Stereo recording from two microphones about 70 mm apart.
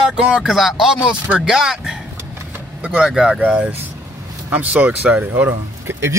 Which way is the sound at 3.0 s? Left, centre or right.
Centre.